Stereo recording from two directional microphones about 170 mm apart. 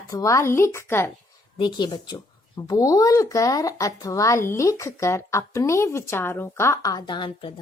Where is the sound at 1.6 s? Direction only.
25° left (ahead or behind).